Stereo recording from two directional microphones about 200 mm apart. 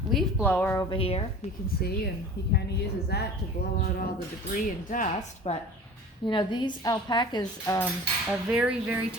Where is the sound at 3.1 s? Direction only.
55° left (ahead or behind).